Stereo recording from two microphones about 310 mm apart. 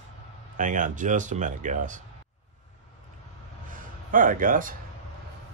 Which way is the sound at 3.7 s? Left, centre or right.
Right.